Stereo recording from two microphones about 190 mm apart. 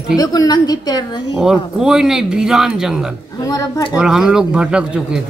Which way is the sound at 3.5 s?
20° left (ahead or behind).